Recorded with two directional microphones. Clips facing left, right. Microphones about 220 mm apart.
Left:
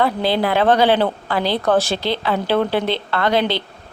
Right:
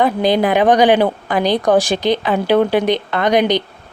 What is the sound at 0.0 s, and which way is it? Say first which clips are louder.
Speech: right 4 dB; 15° right (ahead or behind).